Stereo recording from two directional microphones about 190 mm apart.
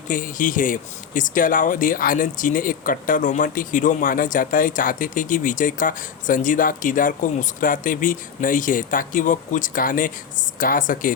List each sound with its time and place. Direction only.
0.1 s speech: 45° left (ahead or behind)